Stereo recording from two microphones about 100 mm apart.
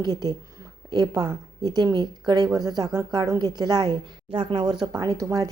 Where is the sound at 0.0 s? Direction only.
40° right (ahead or behind); by 4.6 s 55° right (ahead or behind).